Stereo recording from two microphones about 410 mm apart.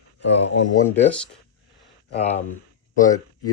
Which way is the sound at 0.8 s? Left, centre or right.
Centre.